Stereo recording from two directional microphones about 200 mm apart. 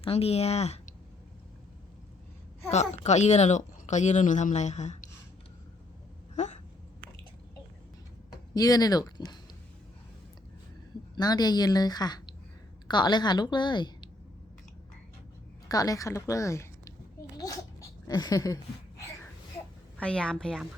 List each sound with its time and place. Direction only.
0.0 s a woman's voice: 30° left (ahead or behind)
3.0 s speech: 35° left (ahead or behind)
6.3 s a sound: 35° left (ahead or behind)
8.5 s a woman's voice: 20° left (ahead or behind)
11.1 s a woman's voice: 20° left (ahead or behind)
15.7 s a sound: 20° left (ahead or behind)
20.0 s a woman's voice: 5° left (ahead or behind)